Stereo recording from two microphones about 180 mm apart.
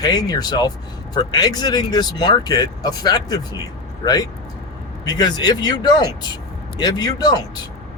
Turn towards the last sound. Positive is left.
turn(degrees=20)  # may be behind; listen again after turning